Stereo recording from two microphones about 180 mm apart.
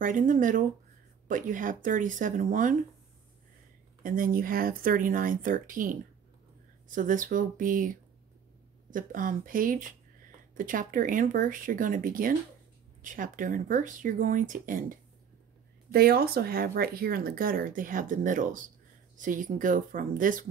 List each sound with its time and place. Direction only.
0.0 s speech: 45° right (ahead or behind)
4.0 s speech: 50° right (ahead or behind)